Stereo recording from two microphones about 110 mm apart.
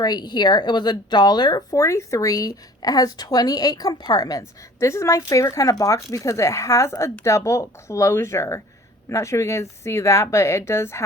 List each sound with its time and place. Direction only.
0.0 s a woman's voice: 40° left (ahead or behind)